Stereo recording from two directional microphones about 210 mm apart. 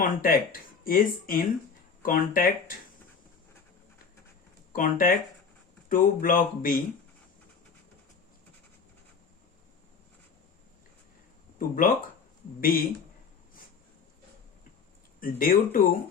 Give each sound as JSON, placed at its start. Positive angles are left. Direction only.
{"t": 0.0, "sound": "speech", "side_deg": 40}
{"t": 4.7, "sound": "speech", "side_deg": 40}
{"t": 11.7, "sound": "speech", "side_deg": 40}
{"t": 15.2, "sound": "speech", "side_deg": 45}